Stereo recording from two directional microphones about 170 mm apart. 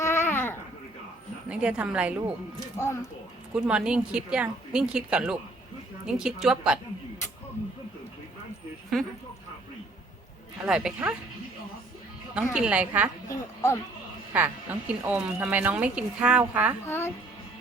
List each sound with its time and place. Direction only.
0.3 s babbling: 15° left (ahead or behind)
1.5 s speech: 5° right (ahead or behind)
2.7 s a child's voice: 15° left (ahead or behind)
3.5 s speech: 5° right (ahead or behind)
10.7 s speech: 5° right (ahead or behind)
12.3 s speech: 5° right (ahead or behind)
13.2 s speech: 20° left (ahead or behind)
14.3 s speech: 10° right (ahead or behind)
16.8 s a child's voice: 15° left (ahead or behind)